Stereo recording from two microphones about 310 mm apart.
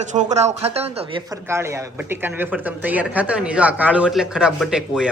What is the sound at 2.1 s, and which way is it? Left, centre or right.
A woman's voice, centre.